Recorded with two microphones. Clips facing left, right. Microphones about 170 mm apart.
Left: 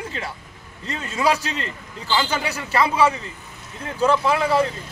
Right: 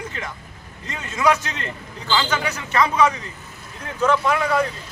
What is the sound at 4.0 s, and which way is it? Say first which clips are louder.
Speech: left 1 dB; 30° left (ahead or behind).